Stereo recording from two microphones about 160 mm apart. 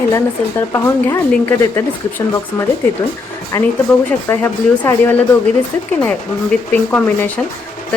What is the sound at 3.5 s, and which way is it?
Speech, 15° left (ahead or behind).